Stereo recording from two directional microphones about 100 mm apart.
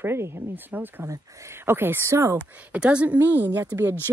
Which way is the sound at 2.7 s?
10° right (ahead or behind).